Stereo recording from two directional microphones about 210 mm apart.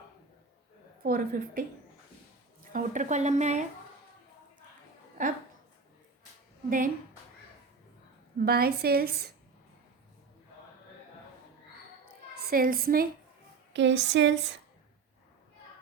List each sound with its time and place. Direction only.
1.0 s a woman's voice: 45° right (ahead or behind)
2.7 s speech: 35° right (ahead or behind)
5.2 s speech: 40° right (ahead or behind)
6.7 s speech: 40° right (ahead or behind)
8.4 s a woman's voice: 45° right (ahead or behind)
12.5 s a woman's voice: 45° right (ahead or behind)
13.7 s a sound: 60° right (ahead or behind)